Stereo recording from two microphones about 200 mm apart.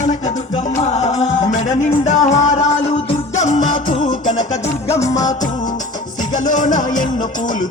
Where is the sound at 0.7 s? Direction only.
30° left (ahead or behind).